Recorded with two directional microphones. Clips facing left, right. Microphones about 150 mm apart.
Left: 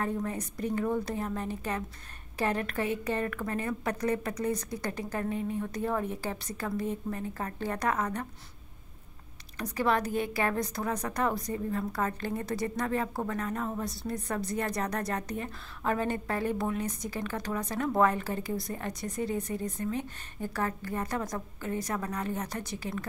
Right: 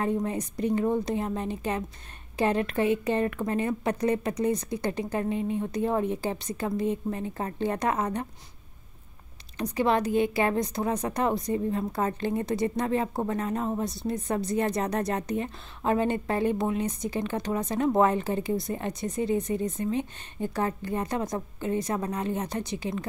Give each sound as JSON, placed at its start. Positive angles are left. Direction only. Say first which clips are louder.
{"t": 0.0, "sound": "a woman's voice", "louder": "right 5 dB", "side_deg": -20}
{"t": 9.6, "sound": "a woman's voice", "louder": "right 4 dB", "side_deg": -25}